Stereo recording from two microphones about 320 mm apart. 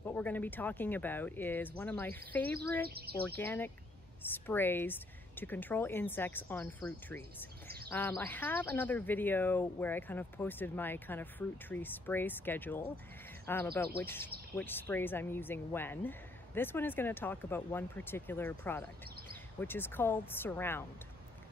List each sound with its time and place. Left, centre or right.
0.0 s speech: centre
7.6 s bird: right
7.9 s speech: centre